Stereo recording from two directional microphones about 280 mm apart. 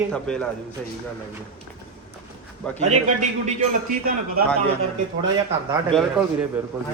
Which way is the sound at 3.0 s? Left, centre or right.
Right.